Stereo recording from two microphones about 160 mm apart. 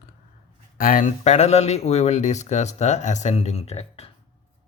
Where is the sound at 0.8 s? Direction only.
60° left (ahead or behind); by 4.1 s 40° left (ahead or behind).